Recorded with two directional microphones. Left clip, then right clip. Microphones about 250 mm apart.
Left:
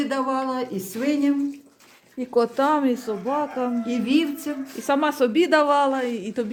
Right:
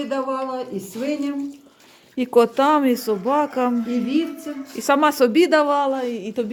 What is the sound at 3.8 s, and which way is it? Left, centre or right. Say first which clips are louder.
Speech: even; left.